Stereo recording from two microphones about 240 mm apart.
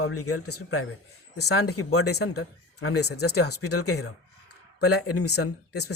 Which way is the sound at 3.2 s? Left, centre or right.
Left.